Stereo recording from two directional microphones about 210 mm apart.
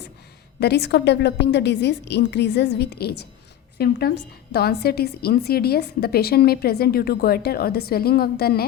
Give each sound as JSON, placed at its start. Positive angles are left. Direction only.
{"t": 0.6, "sound": "a woman's voice", "side_deg": 50}